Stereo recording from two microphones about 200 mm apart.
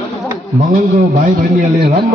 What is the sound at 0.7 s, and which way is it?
Speech, 40° right (ahead or behind).